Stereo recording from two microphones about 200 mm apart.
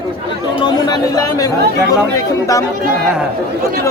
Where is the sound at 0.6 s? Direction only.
20° left (ahead or behind).